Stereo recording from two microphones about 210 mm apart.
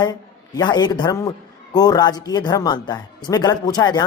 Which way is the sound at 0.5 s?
20° left (ahead or behind).